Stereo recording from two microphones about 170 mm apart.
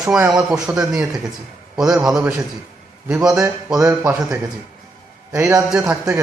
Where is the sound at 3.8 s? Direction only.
15° right (ahead or behind).